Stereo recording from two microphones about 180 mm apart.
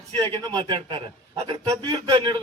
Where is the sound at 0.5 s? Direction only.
25° right (ahead or behind).